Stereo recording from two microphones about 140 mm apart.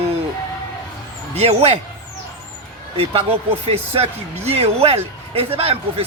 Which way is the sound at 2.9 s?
45° right (ahead or behind).